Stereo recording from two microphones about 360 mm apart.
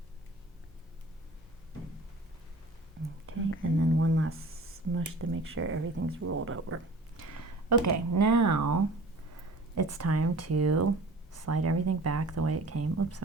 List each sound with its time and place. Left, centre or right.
3.3 s whispering: right
3.8 s a sound: right
4.9 s speech: right
7.7 s speech: right